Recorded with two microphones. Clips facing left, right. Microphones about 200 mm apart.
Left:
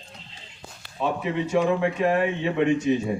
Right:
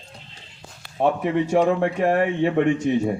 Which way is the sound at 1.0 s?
55° right (ahead or behind).